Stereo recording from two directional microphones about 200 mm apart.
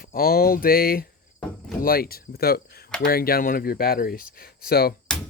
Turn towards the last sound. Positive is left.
turn(degrees=50)  # may be behind; listen again after turning